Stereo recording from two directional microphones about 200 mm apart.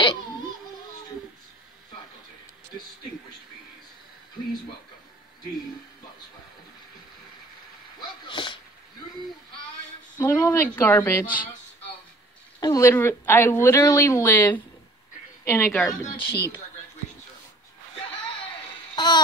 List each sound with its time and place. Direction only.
8.3 s sneeze: 25° left (ahead or behind)
10.1 s speech: 15° left (ahead or behind)
11.2 s speech: 45° left (ahead or behind)
12.5 s a woman's voice: 15° left (ahead or behind)
16.3 s speech: 55° left (ahead or behind)
18.9 s a sound: 20° left (ahead or behind)